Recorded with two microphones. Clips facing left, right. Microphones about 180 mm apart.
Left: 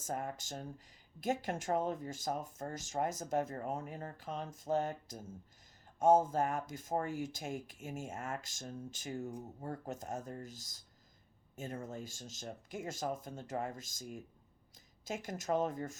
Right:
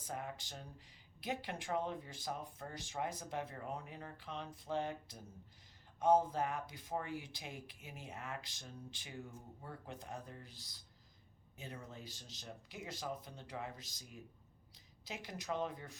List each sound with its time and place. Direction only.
0.0 s speech: 45° left (ahead or behind)